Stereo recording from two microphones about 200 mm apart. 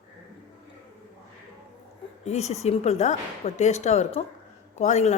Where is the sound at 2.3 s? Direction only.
35° left (ahead or behind).